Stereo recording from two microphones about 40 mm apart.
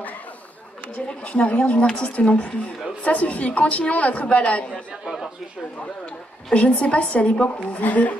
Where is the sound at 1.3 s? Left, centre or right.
Left.